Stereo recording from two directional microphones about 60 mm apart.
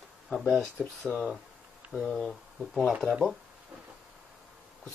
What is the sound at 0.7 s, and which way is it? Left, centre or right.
Speech, centre.